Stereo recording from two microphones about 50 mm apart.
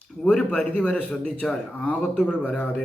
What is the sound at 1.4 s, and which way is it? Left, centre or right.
Speech, centre.